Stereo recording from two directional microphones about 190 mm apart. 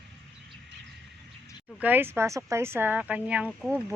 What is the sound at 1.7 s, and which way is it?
A woman's voice, 10° right (ahead or behind).